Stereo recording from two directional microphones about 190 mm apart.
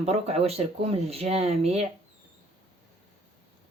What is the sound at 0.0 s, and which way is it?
Speech, 35° right (ahead or behind).